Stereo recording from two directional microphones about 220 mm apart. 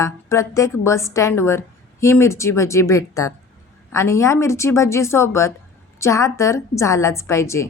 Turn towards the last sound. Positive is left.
turn(degrees=10)  # may be behind; listen again after turning